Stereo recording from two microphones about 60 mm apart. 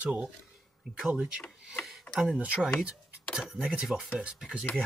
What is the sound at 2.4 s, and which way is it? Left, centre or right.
Speech, centre.